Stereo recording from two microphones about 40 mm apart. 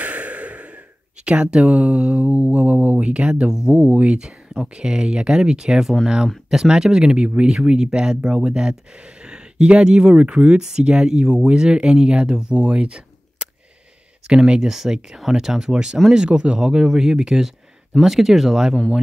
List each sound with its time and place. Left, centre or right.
0.0 s a sound: right
2.7 s speech: right
3.0 s speech: right
3.4 s speech: centre
3.7 s speech: right
4.2 s speech: centre
7.2 s speech: right
16.6 s speech: centre